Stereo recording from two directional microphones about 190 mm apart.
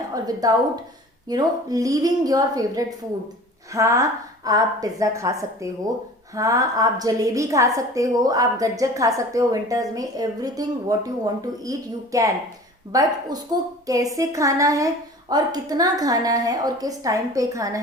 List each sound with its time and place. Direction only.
0.1 s a woman's voice: 20° right (ahead or behind)